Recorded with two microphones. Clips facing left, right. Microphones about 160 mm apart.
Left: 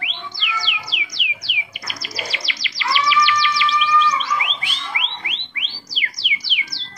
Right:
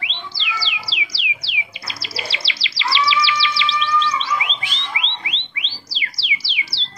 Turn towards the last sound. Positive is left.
turn(degrees=-30)  # may be behind; listen again after turning